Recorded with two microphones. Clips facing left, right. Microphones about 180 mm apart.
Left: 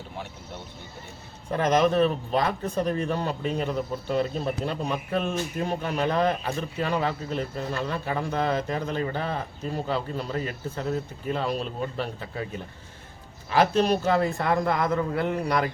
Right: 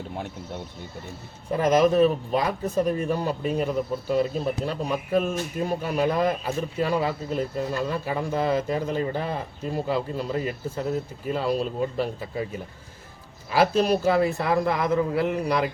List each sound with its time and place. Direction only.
1.5 s speech: 5° right (ahead or behind)
13.5 s a man's voice: 10° right (ahead or behind)